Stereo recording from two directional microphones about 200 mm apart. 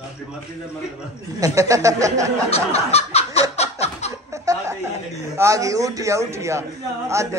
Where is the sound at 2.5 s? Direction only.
30° left (ahead or behind).